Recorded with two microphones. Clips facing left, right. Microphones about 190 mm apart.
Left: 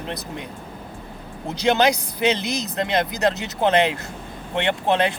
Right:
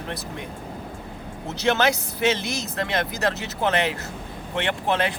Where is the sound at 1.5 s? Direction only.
15° left (ahead or behind).